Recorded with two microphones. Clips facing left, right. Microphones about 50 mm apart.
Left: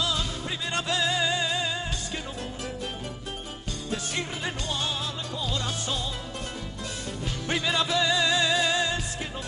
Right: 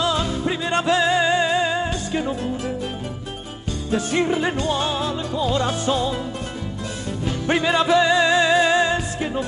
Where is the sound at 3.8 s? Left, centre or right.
Right.